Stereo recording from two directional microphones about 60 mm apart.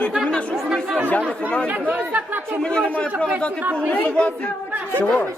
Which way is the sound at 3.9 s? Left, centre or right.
Left.